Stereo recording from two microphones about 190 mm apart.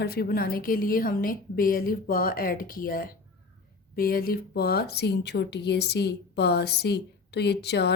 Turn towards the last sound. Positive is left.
turn(degrees=60)  # may be behind; listen again after turning